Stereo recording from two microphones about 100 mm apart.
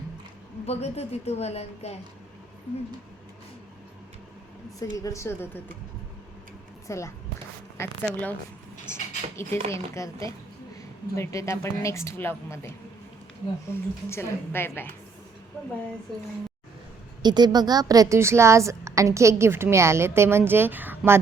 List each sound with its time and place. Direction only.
0.6 s a woman's voice: 90° left
4.8 s speech: 35° left (ahead or behind)
6.8 s speech: 30° left (ahead or behind)
8.1 s speech: 20° left (ahead or behind)
9.6 s speech: 70° right (ahead or behind)
9.9 s a woman's voice: 30° left (ahead or behind)
17.2 s a woman's voice: 45° right (ahead or behind); by 21.2 s 20° right (ahead or behind)